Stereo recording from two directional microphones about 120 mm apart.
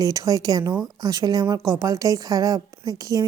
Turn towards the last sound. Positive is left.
turn(degrees=-30)  # may be behind; listen again after turning